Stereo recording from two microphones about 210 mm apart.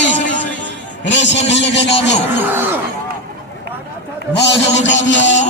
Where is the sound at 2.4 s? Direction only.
10° right (ahead or behind).